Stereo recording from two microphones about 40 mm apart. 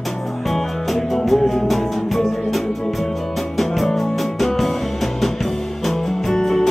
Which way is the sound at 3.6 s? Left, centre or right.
Centre.